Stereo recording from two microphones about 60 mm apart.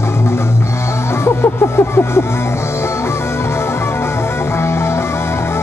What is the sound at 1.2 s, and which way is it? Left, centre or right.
Vehicle, left.